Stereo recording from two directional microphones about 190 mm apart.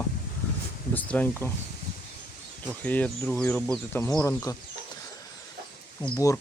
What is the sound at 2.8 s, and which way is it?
Speech, 10° left (ahead or behind).